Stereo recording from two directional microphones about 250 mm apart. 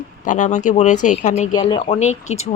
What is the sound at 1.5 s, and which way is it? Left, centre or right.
Speech, centre.